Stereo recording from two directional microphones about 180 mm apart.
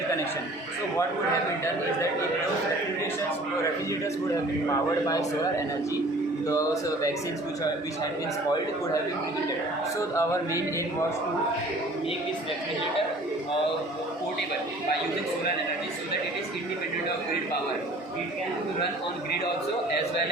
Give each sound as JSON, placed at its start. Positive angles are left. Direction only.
{"t": 5.0, "sound": "a man's voice", "side_deg": 20}
{"t": 10.0, "sound": "speech", "side_deg": 15}